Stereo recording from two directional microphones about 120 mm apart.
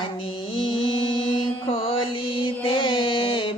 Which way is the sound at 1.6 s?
45° left (ahead or behind).